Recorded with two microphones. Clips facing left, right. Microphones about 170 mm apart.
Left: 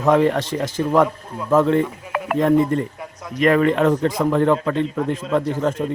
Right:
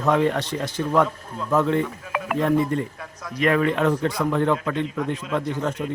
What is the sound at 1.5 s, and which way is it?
A man's voice, 45° left (ahead or behind).